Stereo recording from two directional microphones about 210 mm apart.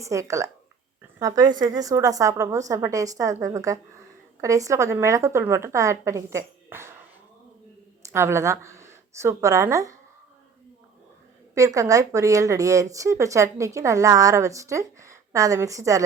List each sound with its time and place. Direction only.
0.0 s speech: 15° right (ahead or behind)
8.1 s speech: 10° right (ahead or behind)
11.5 s speech: 15° right (ahead or behind)